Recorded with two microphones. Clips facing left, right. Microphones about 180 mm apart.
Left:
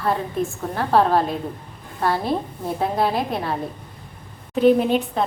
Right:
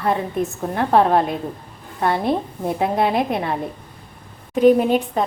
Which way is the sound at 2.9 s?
15° right (ahead or behind).